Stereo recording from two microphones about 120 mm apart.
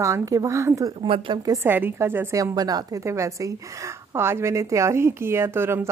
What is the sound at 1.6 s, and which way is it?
Speech, 15° right (ahead or behind).